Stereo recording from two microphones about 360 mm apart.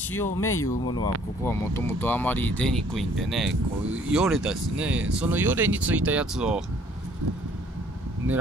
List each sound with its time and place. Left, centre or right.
0.1 s speech: centre